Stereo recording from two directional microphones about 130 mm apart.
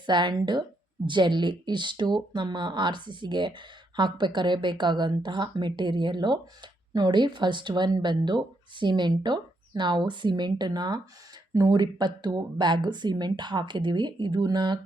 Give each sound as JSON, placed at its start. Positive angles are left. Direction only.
{"t": 0.0, "sound": "speech", "side_deg": -35}